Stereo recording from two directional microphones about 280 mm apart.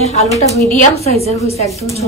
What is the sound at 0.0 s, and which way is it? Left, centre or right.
A woman's voice, left.